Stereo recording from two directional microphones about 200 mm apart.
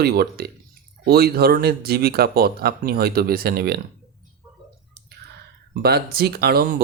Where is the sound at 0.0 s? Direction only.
50° right (ahead or behind).